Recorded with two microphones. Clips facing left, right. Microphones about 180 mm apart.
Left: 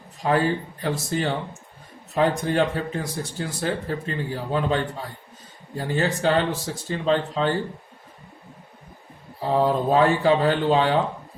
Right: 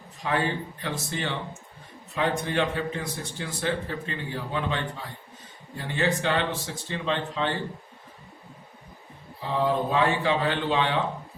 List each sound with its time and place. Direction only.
0.2 s a man's voice: 40° left (ahead or behind)
9.4 s a man's voice: 40° left (ahead or behind)